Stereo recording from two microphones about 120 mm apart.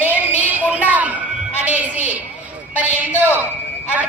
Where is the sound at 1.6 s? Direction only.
15° right (ahead or behind).